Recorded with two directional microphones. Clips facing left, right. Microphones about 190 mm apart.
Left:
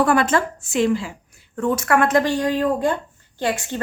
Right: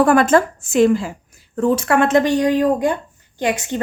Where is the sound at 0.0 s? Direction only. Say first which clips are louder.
Right 5 dB; 50° right (ahead or behind).